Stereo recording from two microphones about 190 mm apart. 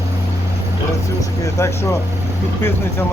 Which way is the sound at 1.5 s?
15° left (ahead or behind).